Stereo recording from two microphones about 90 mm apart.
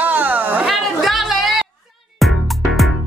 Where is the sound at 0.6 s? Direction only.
Centre (ahead or behind).